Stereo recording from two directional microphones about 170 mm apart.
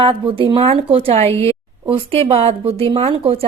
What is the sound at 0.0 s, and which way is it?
Speech, 30° right (ahead or behind).